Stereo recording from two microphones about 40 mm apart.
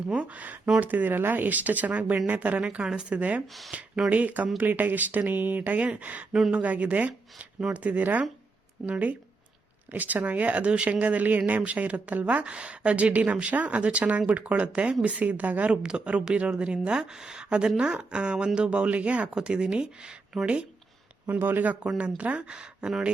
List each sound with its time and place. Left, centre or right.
0.1 s speech: right
2.6 s speech: right
3.2 s speech: right
4.6 s speech: right
19.3 s speech: right
21.3 s speech: right
22.2 s speech: right
22.4 s speech: right